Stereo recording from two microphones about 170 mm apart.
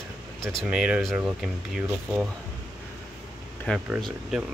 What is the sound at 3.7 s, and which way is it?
Speech, 5° left (ahead or behind).